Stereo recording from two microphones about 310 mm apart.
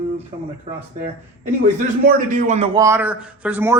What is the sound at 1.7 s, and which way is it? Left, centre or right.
A man's voice, right.